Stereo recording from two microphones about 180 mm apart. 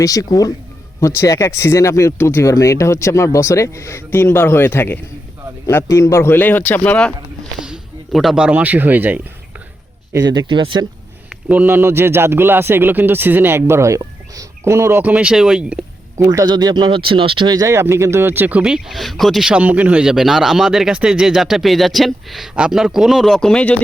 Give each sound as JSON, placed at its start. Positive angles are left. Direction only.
{"t": 0.0, "sound": "speech", "side_deg": 20}
{"t": 7.6, "sound": "speech", "side_deg": -5}
{"t": 10.1, "sound": "speech", "side_deg": -20}
{"t": 11.3, "sound": "a man's voice", "side_deg": -10}
{"t": 16.1, "sound": "speech", "side_deg": -20}